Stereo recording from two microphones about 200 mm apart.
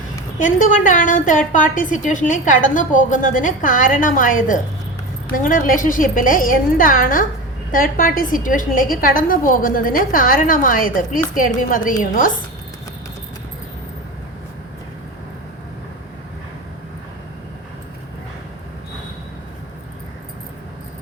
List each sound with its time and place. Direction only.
0.3 s a woman's voice: 40° left (ahead or behind)